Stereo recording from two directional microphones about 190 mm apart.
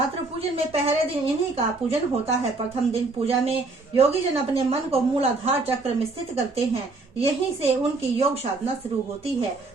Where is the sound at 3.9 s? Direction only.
30° right (ahead or behind).